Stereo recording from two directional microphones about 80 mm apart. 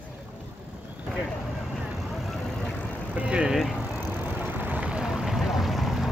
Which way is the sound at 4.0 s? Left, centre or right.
Right.